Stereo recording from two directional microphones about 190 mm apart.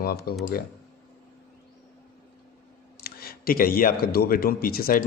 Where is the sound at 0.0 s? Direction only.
55° left (ahead or behind).